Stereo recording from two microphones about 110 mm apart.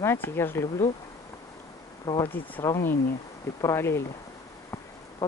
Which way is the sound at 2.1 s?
30° left (ahead or behind).